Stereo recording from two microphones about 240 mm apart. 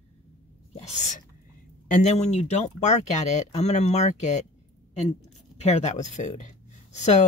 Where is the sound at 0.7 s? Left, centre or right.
Left.